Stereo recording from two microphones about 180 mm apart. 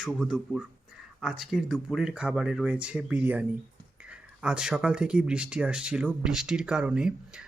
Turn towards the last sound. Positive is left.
turn(degrees=-5)  # may be behind; listen again after turning